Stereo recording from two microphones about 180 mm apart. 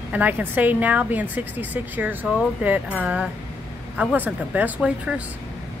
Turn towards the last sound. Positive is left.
turn(degrees=-5)  # may be behind; listen again after turning